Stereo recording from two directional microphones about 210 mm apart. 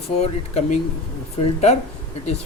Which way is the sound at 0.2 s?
30° left (ahead or behind).